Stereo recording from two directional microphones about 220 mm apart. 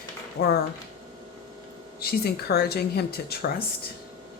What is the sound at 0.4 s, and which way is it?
Speech, 45° left (ahead or behind).